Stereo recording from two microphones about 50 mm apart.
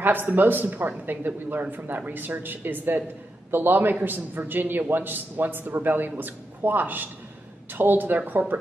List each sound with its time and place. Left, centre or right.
0.0 s a man's voice: right